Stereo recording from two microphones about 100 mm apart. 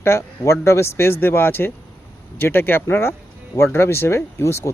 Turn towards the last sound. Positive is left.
turn(degrees=25)  # may be behind; listen again after turning